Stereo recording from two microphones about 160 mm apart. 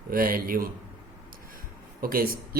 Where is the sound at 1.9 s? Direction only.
65° right (ahead or behind).